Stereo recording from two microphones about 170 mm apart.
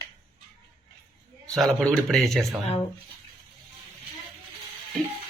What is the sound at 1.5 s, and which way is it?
A man's voice, centre (ahead or behind).